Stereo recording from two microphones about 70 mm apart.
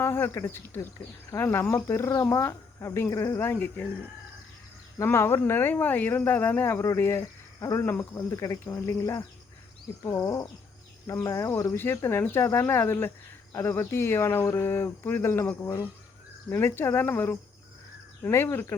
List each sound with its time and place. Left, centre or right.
0.0 s speech: left
5.1 s speech: left
8.7 s speech: left
10.0 s speech: left
11.2 s speech: left